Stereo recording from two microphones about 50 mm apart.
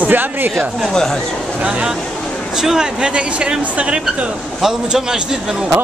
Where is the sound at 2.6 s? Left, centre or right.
Centre.